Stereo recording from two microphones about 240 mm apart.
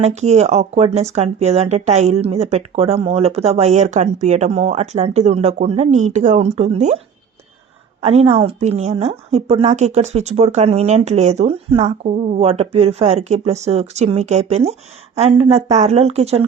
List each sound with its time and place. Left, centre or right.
0.0 s a woman's voice: right
8.0 s a woman's voice: right